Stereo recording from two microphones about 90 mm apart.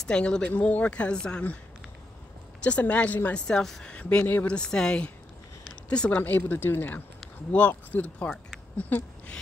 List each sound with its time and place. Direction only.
0.0 s speech: 10° left (ahead or behind)
2.6 s speech: 15° left (ahead or behind)